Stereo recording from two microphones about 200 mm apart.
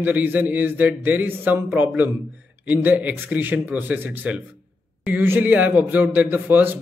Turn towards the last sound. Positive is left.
turn(degrees=-10)  # may be behind; listen again after turning